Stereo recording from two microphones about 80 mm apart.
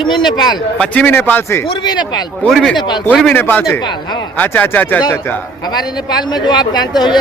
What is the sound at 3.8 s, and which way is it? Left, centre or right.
Speech, left.